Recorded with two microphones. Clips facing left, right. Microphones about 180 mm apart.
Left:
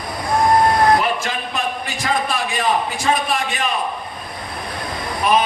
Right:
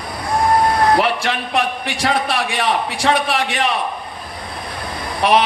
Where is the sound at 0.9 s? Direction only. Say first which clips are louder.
Right 2 dB; 75° right (ahead or behind).